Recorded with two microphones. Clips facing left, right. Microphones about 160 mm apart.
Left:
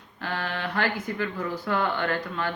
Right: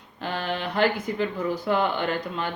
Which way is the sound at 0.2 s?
20° right (ahead or behind).